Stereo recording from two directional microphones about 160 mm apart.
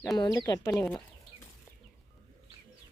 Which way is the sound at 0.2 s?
25° left (ahead or behind).